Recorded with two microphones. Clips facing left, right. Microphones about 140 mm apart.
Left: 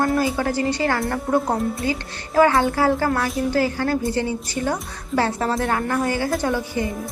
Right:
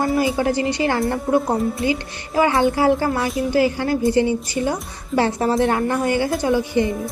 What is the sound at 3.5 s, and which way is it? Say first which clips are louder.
A woman's voice: right 3 dB; 15° right (ahead or behind).